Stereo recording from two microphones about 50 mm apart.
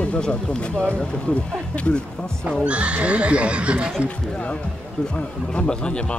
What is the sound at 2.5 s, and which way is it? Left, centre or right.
Speech, right.